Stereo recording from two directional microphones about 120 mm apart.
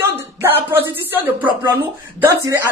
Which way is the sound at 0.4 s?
15° right (ahead or behind).